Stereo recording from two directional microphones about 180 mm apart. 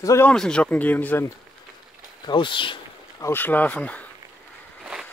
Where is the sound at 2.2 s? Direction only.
25° left (ahead or behind).